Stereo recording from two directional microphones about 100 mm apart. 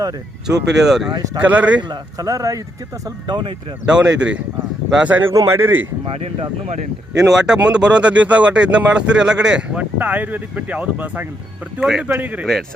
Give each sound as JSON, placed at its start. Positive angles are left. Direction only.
{"t": 0.4, "sound": "speech", "side_deg": -5}
{"t": 1.9, "sound": "speech", "side_deg": -35}
{"t": 3.2, "sound": "speech", "side_deg": -50}
{"t": 3.8, "sound": "speech", "side_deg": -10}
{"t": 5.3, "sound": "a man's voice", "side_deg": -30}
{"t": 6.1, "sound": "speech", "side_deg": -85}
{"t": 7.2, "sound": "speech", "side_deg": -5}
{"t": 12.1, "sound": "speech", "side_deg": -15}